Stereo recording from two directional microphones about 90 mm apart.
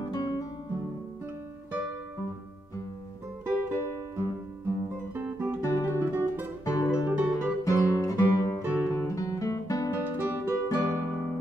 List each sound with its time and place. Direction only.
0.1 s music: 45° left (ahead or behind)
3.4 s music: 25° right (ahead or behind)
5.1 s guitar: 25° right (ahead or behind)
5.6 s guitar: 35° left (ahead or behind)
5.9 s music: 25° right (ahead or behind)
6.6 s music: 35° left (ahead or behind)
6.9 s music: 15° right (ahead or behind)
7.6 s guitar: 35° left (ahead or behind)
10.0 s guitar: 25° right (ahead or behind)
10.7 s music: 40° left (ahead or behind)